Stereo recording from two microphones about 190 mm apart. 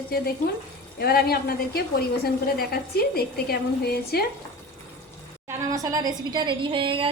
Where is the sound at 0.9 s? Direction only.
55° left (ahead or behind).